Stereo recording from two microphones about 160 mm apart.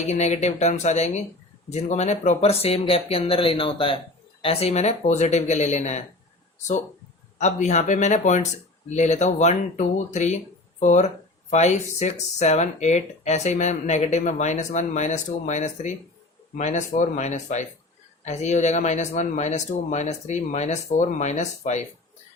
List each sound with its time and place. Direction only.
0.1 s speech: 45° left (ahead or behind)